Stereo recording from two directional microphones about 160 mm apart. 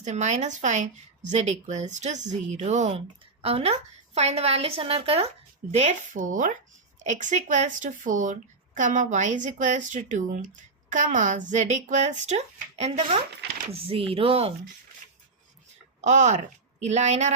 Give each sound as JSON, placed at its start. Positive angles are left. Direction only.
{"t": 0.0, "sound": "a woman's voice", "side_deg": -45}
{"t": 5.7, "sound": "a woman's voice", "side_deg": -45}
{"t": 16.0, "sound": "a woman's voice", "side_deg": -45}